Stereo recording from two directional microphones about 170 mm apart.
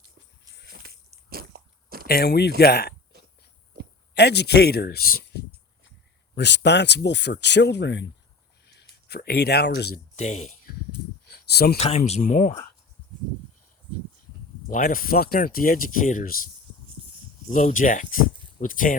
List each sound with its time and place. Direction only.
0.7 s biting: 65° right (ahead or behind)
2.0 s speech: 70° left (ahead or behind)
4.1 s speech: 75° left (ahead or behind)
6.3 s speech: 85° left
8.6 s speech: 75° left (ahead or behind)
10.2 s speech: 45° left (ahead or behind)
11.3 s a sound: 65° left (ahead or behind)
11.8 s speech: 40° left (ahead or behind)
14.7 s speech: 55° left (ahead or behind)
17.5 s speech: 50° left (ahead or behind)